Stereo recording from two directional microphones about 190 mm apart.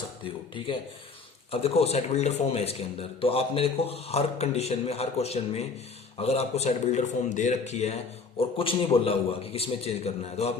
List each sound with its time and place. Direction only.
1.5 s speech: 30° left (ahead or behind)